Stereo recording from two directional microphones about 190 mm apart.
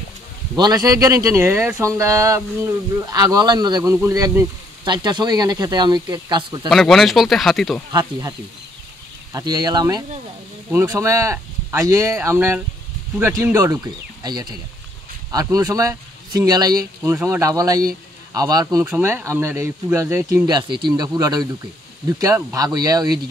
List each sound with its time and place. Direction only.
0.6 s speech: 20° right (ahead or behind)
6.7 s speech: centre (ahead or behind)
7.9 s speech: 20° right (ahead or behind)
18.9 s speech: 10° right (ahead or behind)